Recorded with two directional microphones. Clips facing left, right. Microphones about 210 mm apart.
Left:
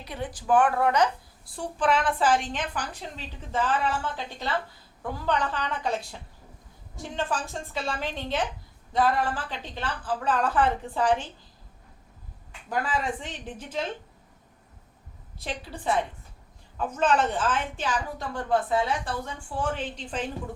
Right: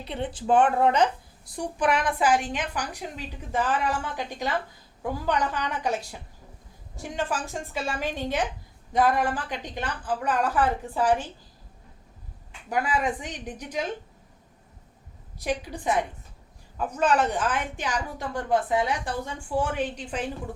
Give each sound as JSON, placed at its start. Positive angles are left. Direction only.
{"t": 0.0, "sound": "a woman's voice", "side_deg": -25}
{"t": 7.0, "sound": "a woman's voice", "side_deg": -10}
{"t": 12.6, "sound": "a woman's voice", "side_deg": -10}
{"t": 15.4, "sound": "a woman's voice", "side_deg": -15}